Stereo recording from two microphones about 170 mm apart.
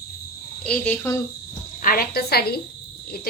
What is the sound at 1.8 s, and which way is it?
Speech, 60° left (ahead or behind).